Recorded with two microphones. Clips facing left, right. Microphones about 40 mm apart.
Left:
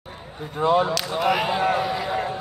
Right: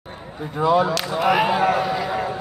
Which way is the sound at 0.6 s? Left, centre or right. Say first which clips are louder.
Right 2 dB; left.